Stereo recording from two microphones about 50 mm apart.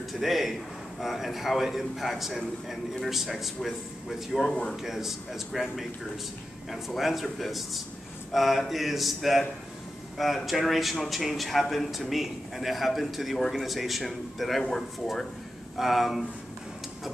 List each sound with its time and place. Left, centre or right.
0.1 s a man's voice: centre
4.8 s speech: centre
7.0 s a man's voice: centre
14.6 s speech: centre
15.8 s a man's voice: centre